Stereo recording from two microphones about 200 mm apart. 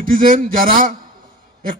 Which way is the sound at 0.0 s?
45° right (ahead or behind).